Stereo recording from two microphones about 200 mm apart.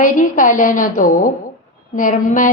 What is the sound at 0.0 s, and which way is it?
A woman's voice, 40° left (ahead or behind).